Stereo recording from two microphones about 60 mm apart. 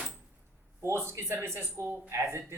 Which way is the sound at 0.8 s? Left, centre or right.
Right.